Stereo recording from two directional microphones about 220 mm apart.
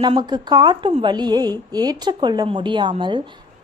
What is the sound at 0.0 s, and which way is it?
A woman's voice, 20° right (ahead or behind).